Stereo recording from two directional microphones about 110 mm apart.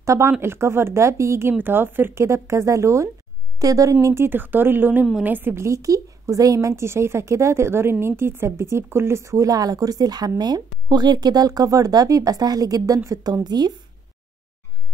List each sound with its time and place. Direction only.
0.0 s a woman's voice: 25° right (ahead or behind)